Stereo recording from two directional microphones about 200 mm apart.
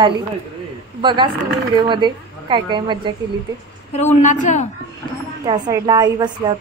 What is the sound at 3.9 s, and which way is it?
Speech, 35° left (ahead or behind).